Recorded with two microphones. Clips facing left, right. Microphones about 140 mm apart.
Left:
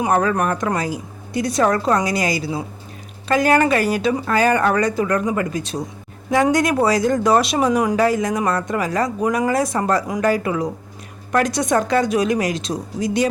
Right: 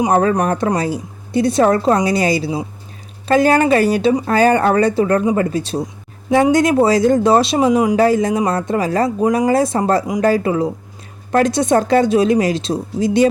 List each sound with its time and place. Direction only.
0.1 s speech: 30° right (ahead or behind)
7.7 s speech: 10° right (ahead or behind)
7.9 s speech: 30° right (ahead or behind)